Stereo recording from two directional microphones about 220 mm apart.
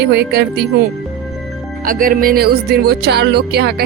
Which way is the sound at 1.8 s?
40° right (ahead or behind).